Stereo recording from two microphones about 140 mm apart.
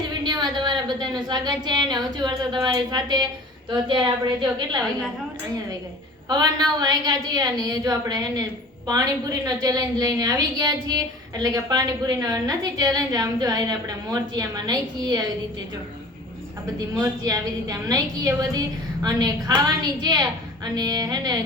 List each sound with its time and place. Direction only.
0.3 s a woman's voice: 30° right (ahead or behind)
6.2 s a woman's voice: 30° right (ahead or behind)
16.7 s a woman's voice: 25° right (ahead or behind)